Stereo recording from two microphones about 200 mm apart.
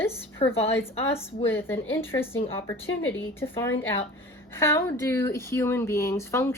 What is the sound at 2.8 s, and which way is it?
Speech, 75° left (ahead or behind).